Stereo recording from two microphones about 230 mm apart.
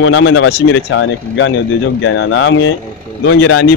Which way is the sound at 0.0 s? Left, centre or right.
Left.